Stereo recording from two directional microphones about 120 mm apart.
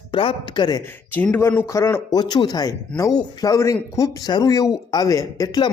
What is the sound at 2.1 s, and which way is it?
Speech, 35° left (ahead or behind).